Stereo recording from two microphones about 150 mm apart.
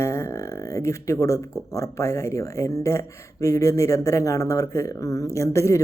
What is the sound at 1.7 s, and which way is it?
Speech, 20° left (ahead or behind).